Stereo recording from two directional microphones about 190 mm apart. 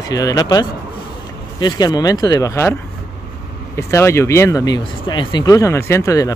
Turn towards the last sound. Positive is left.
turn(degrees=15)  # may be behind; listen again after turning